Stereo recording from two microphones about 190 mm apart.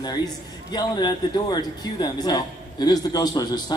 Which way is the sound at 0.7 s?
20° left (ahead or behind).